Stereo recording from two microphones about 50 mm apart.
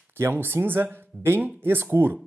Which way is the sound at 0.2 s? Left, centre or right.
Right.